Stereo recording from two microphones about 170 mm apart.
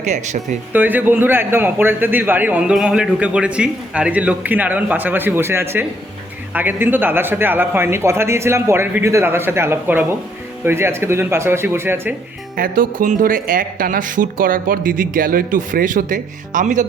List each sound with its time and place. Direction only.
0.0 s speech: 45° right (ahead or behind)
0.7 s a man's voice: 10° right (ahead or behind)
12.5 s speech: 55° right (ahead or behind)